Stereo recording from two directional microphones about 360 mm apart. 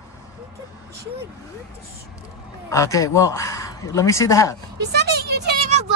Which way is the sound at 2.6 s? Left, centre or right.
Centre.